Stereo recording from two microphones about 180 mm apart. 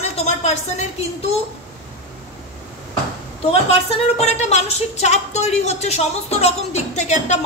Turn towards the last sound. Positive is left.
turn(degrees=40)  # may be behind; listen again after turning